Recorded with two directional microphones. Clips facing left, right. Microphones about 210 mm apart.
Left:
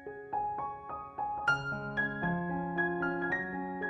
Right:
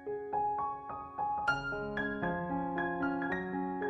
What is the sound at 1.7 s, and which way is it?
Music, centre (ahead or behind).